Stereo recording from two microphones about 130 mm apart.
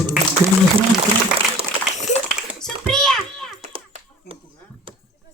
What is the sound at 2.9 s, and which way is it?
Meow, 5° left (ahead or behind).